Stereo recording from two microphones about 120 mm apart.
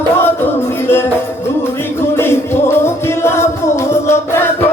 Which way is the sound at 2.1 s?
20° left (ahead or behind).